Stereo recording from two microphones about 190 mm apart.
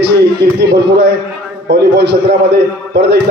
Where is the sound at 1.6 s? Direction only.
65° right (ahead or behind).